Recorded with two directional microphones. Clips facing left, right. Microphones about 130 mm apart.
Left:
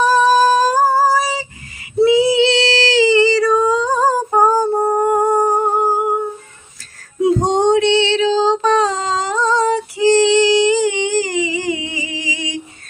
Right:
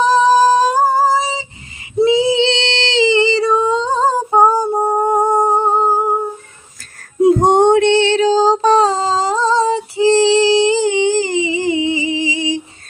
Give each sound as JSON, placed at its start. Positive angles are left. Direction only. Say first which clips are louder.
{"t": 0.0, "sound": "female singing", "louder": "right 1 dB", "side_deg": -20}
{"t": 2.3, "sound": "a sound", "louder": "left 2 dB", "side_deg": -30}
{"t": 3.2, "sound": "female singing", "louder": "left 1 dB", "side_deg": -25}
{"t": 7.2, "sound": "female singing", "louder": "right 4 dB", "side_deg": -50}